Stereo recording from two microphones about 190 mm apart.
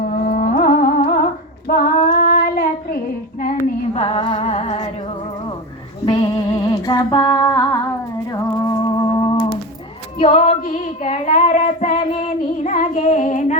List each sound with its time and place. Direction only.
0.0 s humming: 45° left (ahead or behind)
3.9 s music: 30° left (ahead or behind)
6.8 s a sound: 20° left (ahead or behind)
8.6 s music: 20° left (ahead or behind)
10.2 s child singing: 35° left (ahead or behind)